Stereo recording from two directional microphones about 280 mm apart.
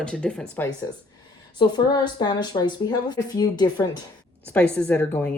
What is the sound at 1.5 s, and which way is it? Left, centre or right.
Speech, centre.